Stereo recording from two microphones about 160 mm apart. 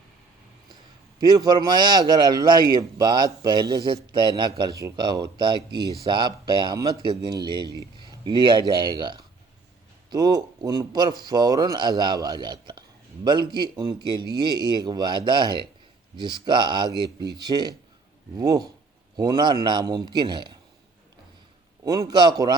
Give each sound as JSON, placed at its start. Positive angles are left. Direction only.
{"t": 1.2, "sound": "a man's voice", "side_deg": -25}
{"t": 21.8, "sound": "a man's voice", "side_deg": -25}